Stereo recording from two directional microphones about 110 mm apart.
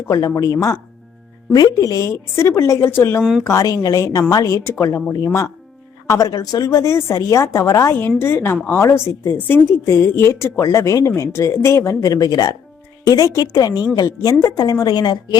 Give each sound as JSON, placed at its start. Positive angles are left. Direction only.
{"t": 0.1, "sound": "a woman's voice", "side_deg": 30}
{"t": 3.2, "sound": "speech", "side_deg": 0}
{"t": 3.4, "sound": "speech", "side_deg": 30}
{"t": 11.9, "sound": "a woman's voice", "side_deg": 35}